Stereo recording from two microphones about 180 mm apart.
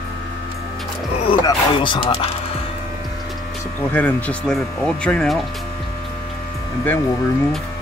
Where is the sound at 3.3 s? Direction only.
5° left (ahead or behind).